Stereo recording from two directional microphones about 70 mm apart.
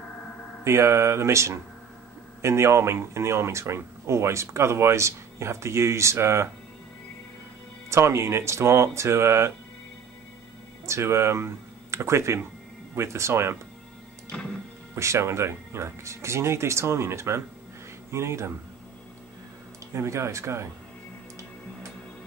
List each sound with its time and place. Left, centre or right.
0.7 s speech: right
7.9 s speech: right
10.9 s speech: right
15.0 s speech: right
19.9 s speech: right